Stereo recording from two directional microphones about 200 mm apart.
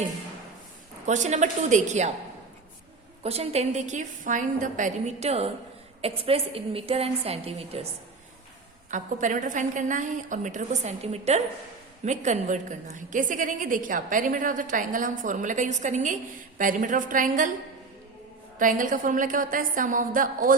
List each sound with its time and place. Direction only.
1.0 s a woman's voice: 35° right (ahead or behind)
3.2 s a woman's voice: 30° right (ahead or behind)
8.9 s a woman's voice: 40° right (ahead or behind)
18.6 s a woman's voice: 40° right (ahead or behind)